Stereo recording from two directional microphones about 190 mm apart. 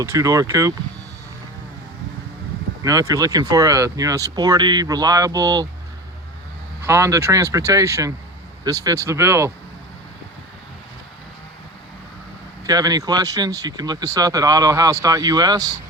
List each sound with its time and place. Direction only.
0.0 s speech: 15° right (ahead or behind)
2.8 s speech: 15° right (ahead or behind)
6.8 s speech: 15° right (ahead or behind)
12.6 s speech: 20° right (ahead or behind)